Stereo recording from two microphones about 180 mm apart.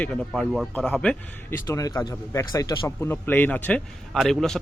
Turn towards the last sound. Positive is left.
turn(degrees=0)  # may be behind; listen again after turning